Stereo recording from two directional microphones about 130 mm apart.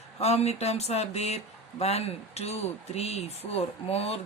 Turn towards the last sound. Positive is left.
turn(degrees=50)  # may be behind; listen again after turning